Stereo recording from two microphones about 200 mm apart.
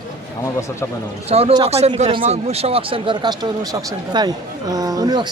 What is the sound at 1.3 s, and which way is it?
A man's voice, 25° right (ahead or behind).